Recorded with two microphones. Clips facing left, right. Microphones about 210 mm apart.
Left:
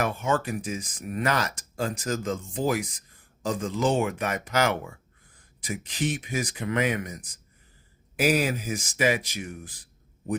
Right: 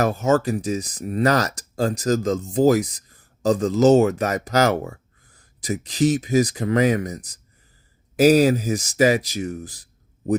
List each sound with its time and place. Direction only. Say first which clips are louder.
0.0 s speech: right 7 dB; 40° right (ahead or behind)